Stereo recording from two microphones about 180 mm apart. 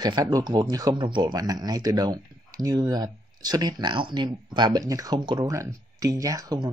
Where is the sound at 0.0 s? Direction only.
20° right (ahead or behind).